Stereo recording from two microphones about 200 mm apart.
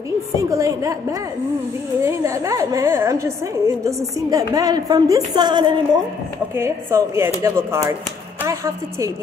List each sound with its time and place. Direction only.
0.4 s a woman's voice: 15° right (ahead or behind)
2.0 s a woman's voice: 15° right (ahead or behind)